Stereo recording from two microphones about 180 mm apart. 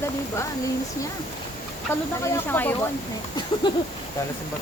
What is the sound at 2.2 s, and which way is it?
Speech, 15° left (ahead or behind).